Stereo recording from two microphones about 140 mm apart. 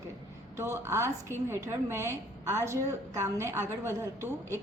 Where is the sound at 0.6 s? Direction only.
20° right (ahead or behind).